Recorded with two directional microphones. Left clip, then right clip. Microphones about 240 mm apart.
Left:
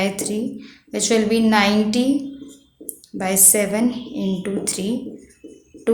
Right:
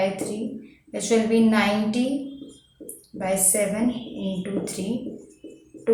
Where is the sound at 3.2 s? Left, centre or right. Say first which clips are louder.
Left 5 dB; left.